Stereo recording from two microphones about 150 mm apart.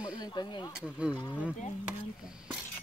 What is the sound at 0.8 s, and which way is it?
Speech, 10° right (ahead or behind).